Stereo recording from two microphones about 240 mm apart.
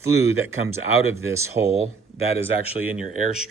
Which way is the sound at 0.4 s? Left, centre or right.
Centre.